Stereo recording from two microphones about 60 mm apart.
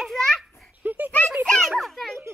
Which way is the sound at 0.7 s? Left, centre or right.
Right.